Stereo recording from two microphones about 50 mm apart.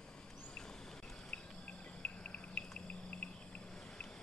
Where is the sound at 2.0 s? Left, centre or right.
Left.